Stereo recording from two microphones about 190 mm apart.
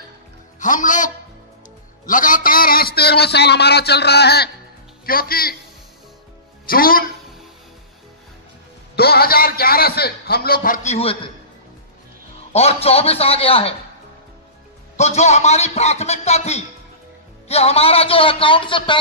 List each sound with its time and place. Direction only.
0.6 s a man's voice: 45° left (ahead or behind)
6.6 s speech: 50° left (ahead or behind)
8.9 s a man's voice: 55° left (ahead or behind); by 11.1 s 35° left (ahead or behind)
12.5 s a man's voice: 30° left (ahead or behind)
15.0 s a man's voice: 35° left (ahead or behind)